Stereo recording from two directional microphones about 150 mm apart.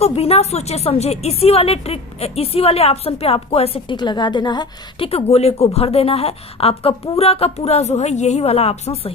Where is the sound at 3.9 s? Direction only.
30° left (ahead or behind).